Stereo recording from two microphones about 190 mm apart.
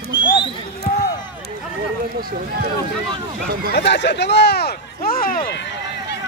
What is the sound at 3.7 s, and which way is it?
Speech, 65° left (ahead or behind).